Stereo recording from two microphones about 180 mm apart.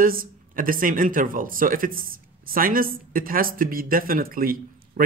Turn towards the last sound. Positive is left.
turn(degrees=-55)  # may be behind; listen again after turning